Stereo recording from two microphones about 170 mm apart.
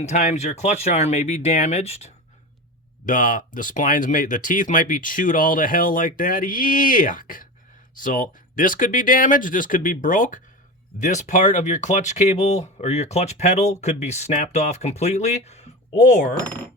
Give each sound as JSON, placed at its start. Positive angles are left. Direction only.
{"t": 0.0, "sound": "speech", "side_deg": 45}
{"t": 3.1, "sound": "speech", "side_deg": 55}